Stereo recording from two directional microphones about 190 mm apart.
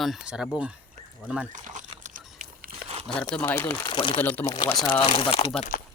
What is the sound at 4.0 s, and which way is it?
Speech, 25° left (ahead or behind).